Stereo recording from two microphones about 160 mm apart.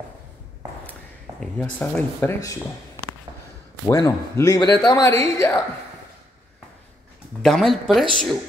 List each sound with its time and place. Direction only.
1.4 s speech: 10° left (ahead or behind)
3.8 s speech: 20° left (ahead or behind)
7.4 s speech: centre (ahead or behind)